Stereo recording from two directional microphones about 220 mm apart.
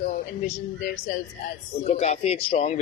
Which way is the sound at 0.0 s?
35° left (ahead or behind).